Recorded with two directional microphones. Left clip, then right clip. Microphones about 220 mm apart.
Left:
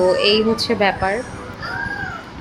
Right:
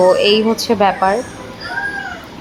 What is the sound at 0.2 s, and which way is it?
Speech, 25° left (ahead or behind).